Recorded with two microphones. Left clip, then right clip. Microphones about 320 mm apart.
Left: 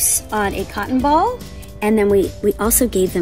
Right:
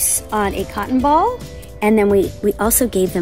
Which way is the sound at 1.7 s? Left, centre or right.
Centre.